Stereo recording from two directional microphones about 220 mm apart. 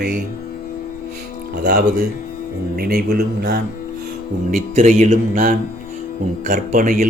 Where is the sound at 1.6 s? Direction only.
45° right (ahead or behind).